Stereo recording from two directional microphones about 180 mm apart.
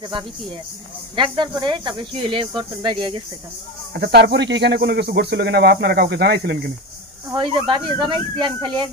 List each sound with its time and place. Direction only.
1.1 s speech: 25° right (ahead or behind)
3.9 s speech: 65° right (ahead or behind)
7.3 s speech: 25° right (ahead or behind)